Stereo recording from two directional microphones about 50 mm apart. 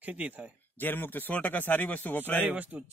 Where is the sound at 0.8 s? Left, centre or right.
Left.